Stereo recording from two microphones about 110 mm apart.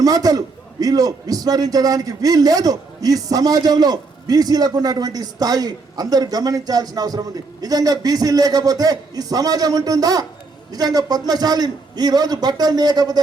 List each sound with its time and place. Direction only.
0.0 s a man's voice: 35° right (ahead or behind)